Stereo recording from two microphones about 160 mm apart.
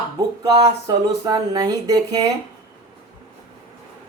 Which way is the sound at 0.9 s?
25° right (ahead or behind).